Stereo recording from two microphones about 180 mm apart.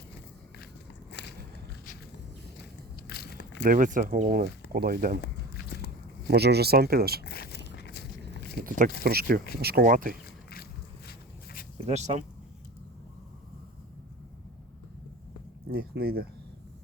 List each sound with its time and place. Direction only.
1.2 s walk: 70° left (ahead or behind)
3.1 s a sound: 60° left (ahead or behind)
3.6 s speech: 50° right (ahead or behind)
5.2 s a sound: 60° left (ahead or behind)
6.3 s speech: 65° right (ahead or behind)
7.3 s walk: 60° left (ahead or behind)
9.0 s speech: 55° right (ahead or behind)
10.5 s vehicle: 60° left (ahead or behind)
11.9 s speech: 40° right (ahead or behind)
15.7 s speech: 60° right (ahead or behind)